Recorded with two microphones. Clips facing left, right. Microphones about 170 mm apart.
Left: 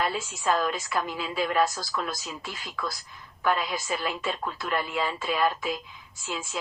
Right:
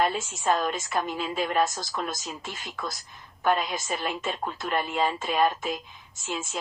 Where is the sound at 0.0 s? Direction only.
25° right (ahead or behind).